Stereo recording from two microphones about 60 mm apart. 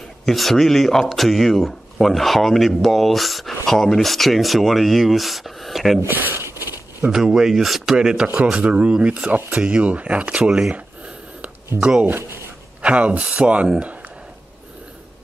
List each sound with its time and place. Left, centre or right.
0.2 s speech: centre
5.9 s speech: right
7.1 s speech: centre
11.8 s speech: centre
12.1 s speech: right
12.8 s a man's voice: right